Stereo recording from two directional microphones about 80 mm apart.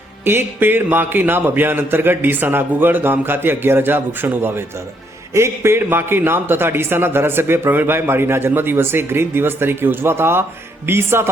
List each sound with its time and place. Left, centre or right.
0.3 s a man's voice: right